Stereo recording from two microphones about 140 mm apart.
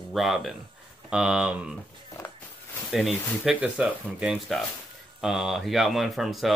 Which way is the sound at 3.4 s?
5° right (ahead or behind).